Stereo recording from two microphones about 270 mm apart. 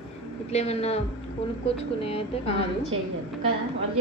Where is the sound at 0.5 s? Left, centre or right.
Left.